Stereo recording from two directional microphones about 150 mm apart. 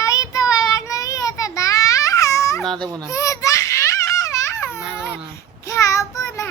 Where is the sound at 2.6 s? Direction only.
Centre (ahead or behind).